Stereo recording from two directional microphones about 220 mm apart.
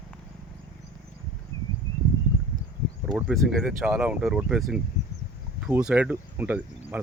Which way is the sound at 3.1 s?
Centre (ahead or behind).